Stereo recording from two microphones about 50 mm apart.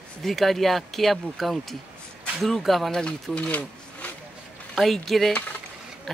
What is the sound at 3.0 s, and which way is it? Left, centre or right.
Speech, left.